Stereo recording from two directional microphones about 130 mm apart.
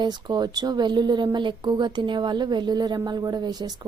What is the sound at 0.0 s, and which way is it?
A woman's voice, 35° right (ahead or behind).